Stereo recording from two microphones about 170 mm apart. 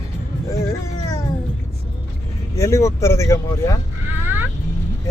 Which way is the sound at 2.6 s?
15° left (ahead or behind).